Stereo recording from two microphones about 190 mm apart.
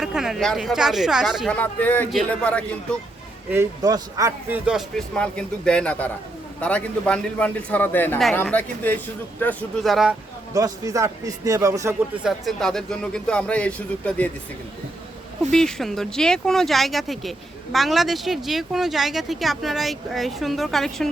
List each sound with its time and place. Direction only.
0.0 s a man's voice: centre (ahead or behind)
3.5 s a man's voice: 15° right (ahead or behind)
10.5 s a man's voice: 20° right (ahead or behind)
12.2 s speech: centre (ahead or behind)
15.5 s speech: centre (ahead or behind)